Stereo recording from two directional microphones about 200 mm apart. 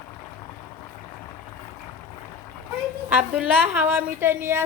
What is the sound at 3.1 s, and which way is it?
A woman's voice, 5° right (ahead or behind).